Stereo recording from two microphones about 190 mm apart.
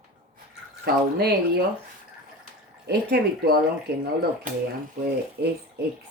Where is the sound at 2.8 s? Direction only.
60° right (ahead or behind).